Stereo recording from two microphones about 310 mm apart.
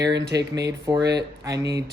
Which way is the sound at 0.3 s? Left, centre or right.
Centre.